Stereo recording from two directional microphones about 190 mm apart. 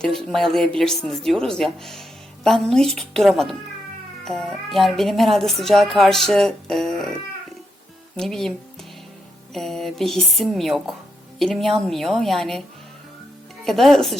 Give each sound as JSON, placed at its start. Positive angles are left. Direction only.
{"t": 0.0, "sound": "speech", "side_deg": 0}
{"t": 8.1, "sound": "speech", "side_deg": 5}
{"t": 13.7, "sound": "speech", "side_deg": 0}